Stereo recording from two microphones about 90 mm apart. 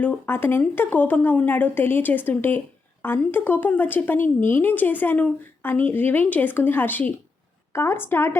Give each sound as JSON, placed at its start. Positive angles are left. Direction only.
{"t": 0.0, "sound": "a woman's voice", "side_deg": 20}